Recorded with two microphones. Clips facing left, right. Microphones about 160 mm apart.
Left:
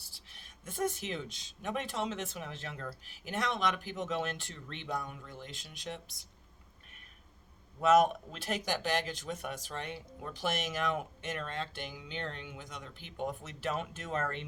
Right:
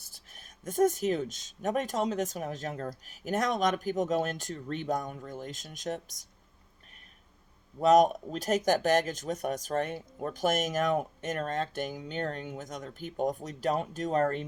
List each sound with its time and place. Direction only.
0.1 s speech: 45° right (ahead or behind)
7.8 s speech: 40° right (ahead or behind)